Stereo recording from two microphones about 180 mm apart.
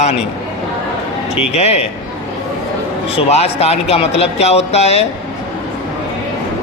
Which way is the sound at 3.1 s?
35° left (ahead or behind).